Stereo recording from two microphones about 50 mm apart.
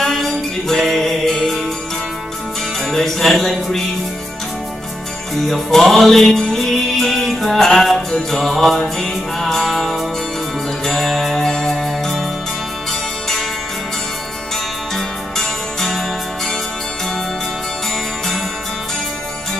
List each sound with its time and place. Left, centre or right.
0.0 s music: centre
2.9 s music: centre
5.5 s music: centre
15.0 s music: centre